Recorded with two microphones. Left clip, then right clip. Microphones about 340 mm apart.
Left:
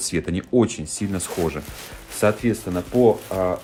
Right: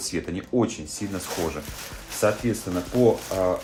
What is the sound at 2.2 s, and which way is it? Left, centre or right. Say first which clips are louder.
Speech: left 3 dB; left.